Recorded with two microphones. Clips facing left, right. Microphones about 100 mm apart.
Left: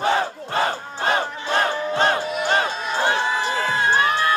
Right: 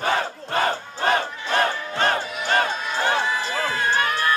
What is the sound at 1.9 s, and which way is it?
Music, 25° left (ahead or behind).